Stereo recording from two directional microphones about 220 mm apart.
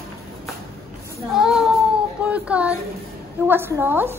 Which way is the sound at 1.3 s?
Centre (ahead or behind).